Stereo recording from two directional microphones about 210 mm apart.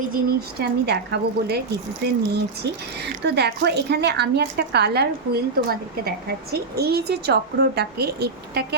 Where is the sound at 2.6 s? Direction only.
55° right (ahead or behind).